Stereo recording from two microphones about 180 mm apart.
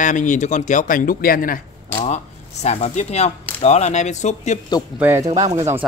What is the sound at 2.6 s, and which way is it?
Speech, 35° left (ahead or behind).